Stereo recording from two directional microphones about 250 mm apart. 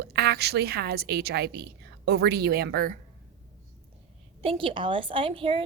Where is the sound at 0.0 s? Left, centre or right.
Right.